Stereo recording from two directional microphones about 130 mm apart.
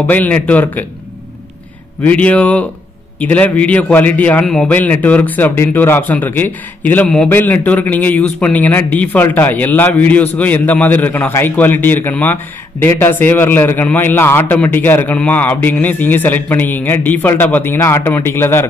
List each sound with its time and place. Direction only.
0.0 s a man's voice: 10° left (ahead or behind)
2.0 s a man's voice: 10° left (ahead or behind)